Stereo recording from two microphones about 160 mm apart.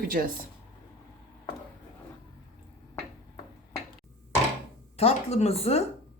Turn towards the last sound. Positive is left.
turn(degrees=40)  # may be behind; listen again after turning